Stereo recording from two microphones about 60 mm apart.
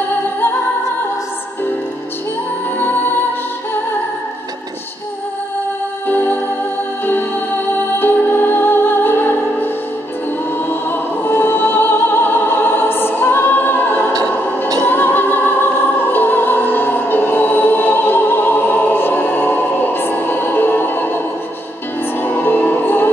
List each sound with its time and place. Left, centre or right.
2.8 s music: left
6.0 s music: left
8.0 s music: left
10.7 s music: left
22.2 s music: left